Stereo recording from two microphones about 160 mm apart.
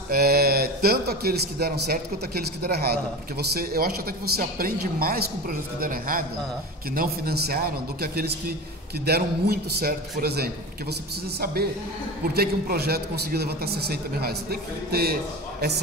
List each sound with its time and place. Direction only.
0.1 s a man's voice: 75° right (ahead or behind)
12.4 s a man's voice: 75° right (ahead or behind)